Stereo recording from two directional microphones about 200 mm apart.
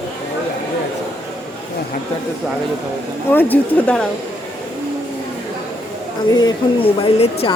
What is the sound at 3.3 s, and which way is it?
Speech, 10° left (ahead or behind).